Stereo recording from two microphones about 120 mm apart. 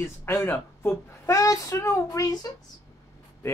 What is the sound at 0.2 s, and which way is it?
A woman's voice, 20° left (ahead or behind).